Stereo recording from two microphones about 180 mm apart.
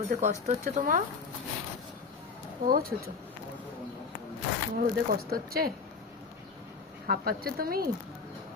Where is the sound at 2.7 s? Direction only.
55° right (ahead or behind).